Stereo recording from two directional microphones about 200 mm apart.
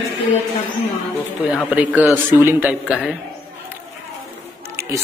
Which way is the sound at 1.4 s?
5° right (ahead or behind).